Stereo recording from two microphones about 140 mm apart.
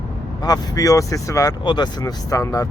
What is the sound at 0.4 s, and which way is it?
Speech, 25° left (ahead or behind).